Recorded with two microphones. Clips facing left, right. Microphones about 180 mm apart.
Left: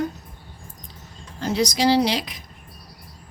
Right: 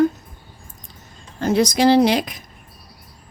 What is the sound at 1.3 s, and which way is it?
A woman's voice, 55° right (ahead or behind).